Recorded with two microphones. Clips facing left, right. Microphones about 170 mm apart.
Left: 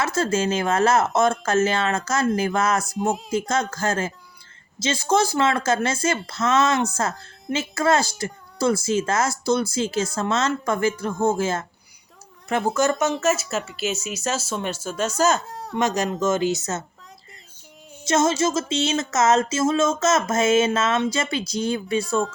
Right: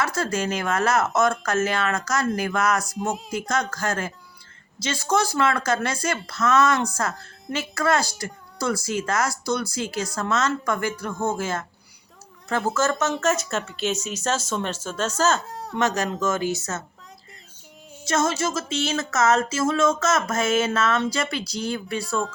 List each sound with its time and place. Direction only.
0.0 s speech: 25° left (ahead or behind)
11.1 s speech: centre (ahead or behind)
11.3 s speech: 25° left (ahead or behind)
12.7 s speech: 15° left (ahead or behind)
13.1 s speech: 5° left (ahead or behind)
15.4 s speech: centre (ahead or behind)
15.8 s speech: 15° left (ahead or behind)
18.1 s speech: 20° left (ahead or behind)